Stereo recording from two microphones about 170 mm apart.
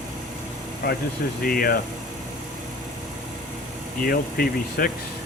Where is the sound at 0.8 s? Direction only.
60° left (ahead or behind).